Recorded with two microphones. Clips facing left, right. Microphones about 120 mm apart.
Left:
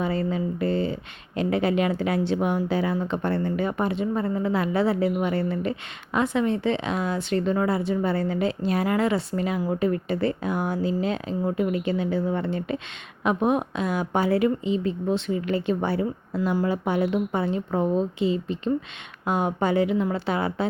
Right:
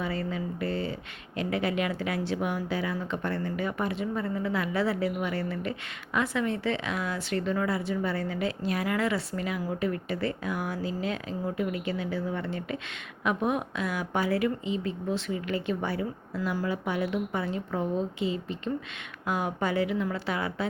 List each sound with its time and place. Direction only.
0.0 s a woman's voice: 25° left (ahead or behind)